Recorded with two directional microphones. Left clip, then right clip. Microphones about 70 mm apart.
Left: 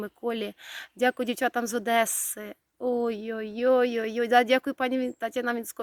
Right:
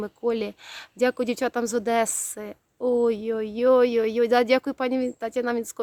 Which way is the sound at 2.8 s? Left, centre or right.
Right.